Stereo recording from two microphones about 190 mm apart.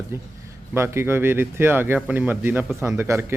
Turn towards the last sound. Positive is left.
turn(degrees=-10)  # may be behind; listen again after turning